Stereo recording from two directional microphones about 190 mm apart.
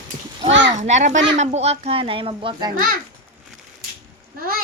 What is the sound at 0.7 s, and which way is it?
A child's voice, 40° right (ahead or behind).